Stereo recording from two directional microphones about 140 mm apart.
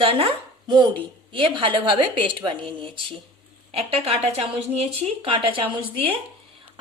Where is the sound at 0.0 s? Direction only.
40° right (ahead or behind).